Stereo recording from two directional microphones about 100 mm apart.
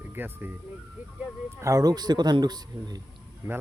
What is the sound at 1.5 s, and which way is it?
Speech, 30° right (ahead or behind).